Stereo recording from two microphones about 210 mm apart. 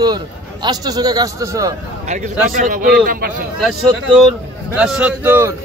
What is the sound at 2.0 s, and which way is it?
A man's voice, 35° right (ahead or behind).